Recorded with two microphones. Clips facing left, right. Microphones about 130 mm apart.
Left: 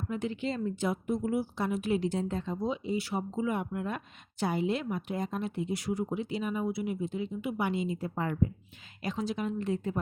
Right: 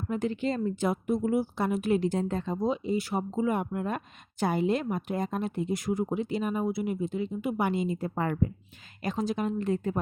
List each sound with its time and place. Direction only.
0.1 s a woman's voice: 45° right (ahead or behind)